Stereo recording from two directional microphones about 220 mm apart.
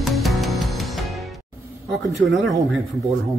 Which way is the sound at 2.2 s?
Centre (ahead or behind).